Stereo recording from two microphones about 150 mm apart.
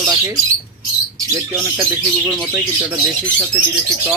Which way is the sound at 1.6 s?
20° right (ahead or behind).